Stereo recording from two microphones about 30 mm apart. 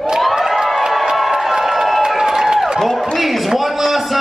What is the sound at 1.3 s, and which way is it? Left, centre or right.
Crowd, centre.